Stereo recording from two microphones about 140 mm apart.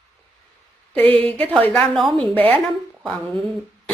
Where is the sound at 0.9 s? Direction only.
40° right (ahead or behind).